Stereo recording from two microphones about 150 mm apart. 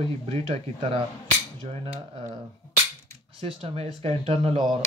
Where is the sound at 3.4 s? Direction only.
40° right (ahead or behind).